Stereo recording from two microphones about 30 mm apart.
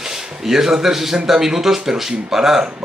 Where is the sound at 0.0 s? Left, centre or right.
Centre.